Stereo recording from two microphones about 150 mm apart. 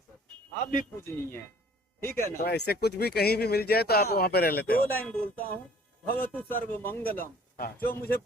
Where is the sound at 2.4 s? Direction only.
90° left.